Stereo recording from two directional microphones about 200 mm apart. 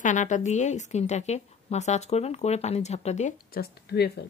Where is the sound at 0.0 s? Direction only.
40° left (ahead or behind).